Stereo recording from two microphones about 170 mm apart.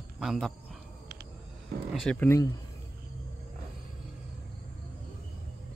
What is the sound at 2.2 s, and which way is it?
Speech, 15° left (ahead or behind).